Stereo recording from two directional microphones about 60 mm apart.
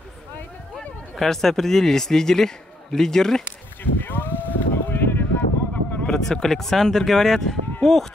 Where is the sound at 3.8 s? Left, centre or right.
Left.